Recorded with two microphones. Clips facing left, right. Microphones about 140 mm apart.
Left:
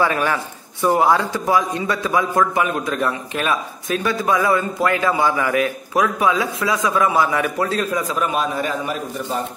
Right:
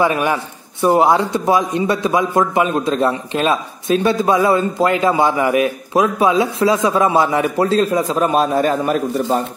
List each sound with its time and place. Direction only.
0.0 s a man's voice: 20° right (ahead or behind); by 8.9 s 40° right (ahead or behind)